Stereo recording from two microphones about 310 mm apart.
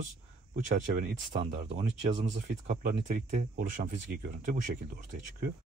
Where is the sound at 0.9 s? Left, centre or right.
Right.